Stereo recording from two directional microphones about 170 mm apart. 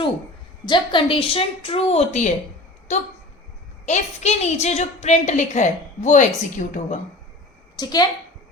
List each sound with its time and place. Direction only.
0.6 s a woman's voice: 30° left (ahead or behind); by 7.0 s 45° left (ahead or behind)
7.8 s a woman's voice: 20° left (ahead or behind)